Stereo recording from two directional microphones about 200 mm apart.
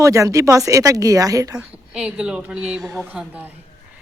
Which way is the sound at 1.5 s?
5° right (ahead or behind).